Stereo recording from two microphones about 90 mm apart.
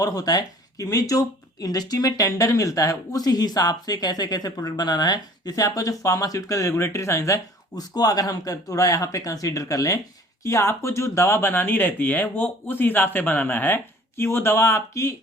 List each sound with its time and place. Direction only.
0.0 s speech: 45° left (ahead or behind)
7.8 s speech: 45° left (ahead or behind)